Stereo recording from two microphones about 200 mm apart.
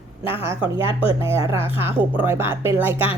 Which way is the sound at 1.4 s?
30° left (ahead or behind).